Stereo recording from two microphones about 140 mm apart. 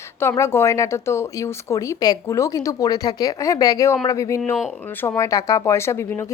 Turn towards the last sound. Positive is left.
turn(degrees=20)  # may be behind; listen again after turning